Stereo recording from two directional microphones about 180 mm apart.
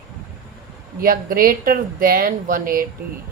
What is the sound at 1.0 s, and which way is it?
Speech, 50° right (ahead or behind).